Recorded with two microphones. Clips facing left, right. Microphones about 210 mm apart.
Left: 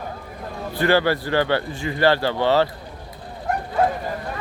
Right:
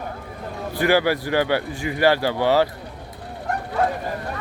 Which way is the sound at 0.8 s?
10° right (ahead or behind).